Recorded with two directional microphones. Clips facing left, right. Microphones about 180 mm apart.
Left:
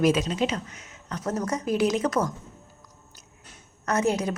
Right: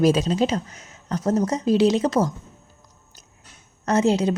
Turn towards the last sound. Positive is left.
turn(degrees=-25)  # may be behind; listen again after turning